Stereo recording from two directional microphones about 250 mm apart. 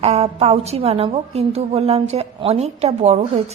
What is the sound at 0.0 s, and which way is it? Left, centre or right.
A woman's voice, right.